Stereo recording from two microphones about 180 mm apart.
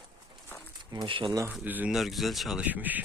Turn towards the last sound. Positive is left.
turn(degrees=-10)  # may be behind; listen again after turning